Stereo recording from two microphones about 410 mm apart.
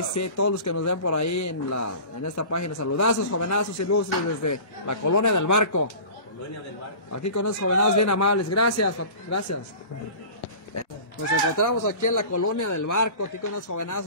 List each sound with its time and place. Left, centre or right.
0.1 s a man's voice: left
7.1 s speech: left
11.5 s a man's voice: left